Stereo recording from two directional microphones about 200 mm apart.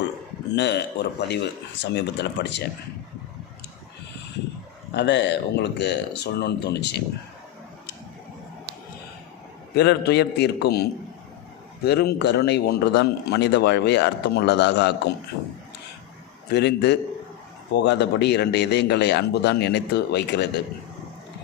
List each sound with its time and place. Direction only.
0.5 s speech: 60° left (ahead or behind)
4.9 s speech: 60° left (ahead or behind)
9.7 s speech: 55° left (ahead or behind)
11.9 s speech: 55° left (ahead or behind)
16.5 s speech: 55° left (ahead or behind)